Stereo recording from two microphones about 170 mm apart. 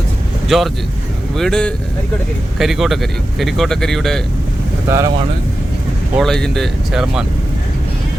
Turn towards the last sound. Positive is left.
turn(degrees=-5)  # may be behind; listen again after turning